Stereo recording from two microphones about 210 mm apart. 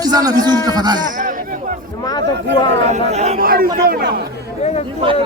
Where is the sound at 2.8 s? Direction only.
30° right (ahead or behind); by 4.2 s 50° right (ahead or behind).